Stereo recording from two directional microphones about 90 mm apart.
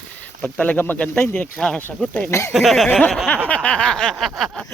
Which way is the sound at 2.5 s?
Centre (ahead or behind).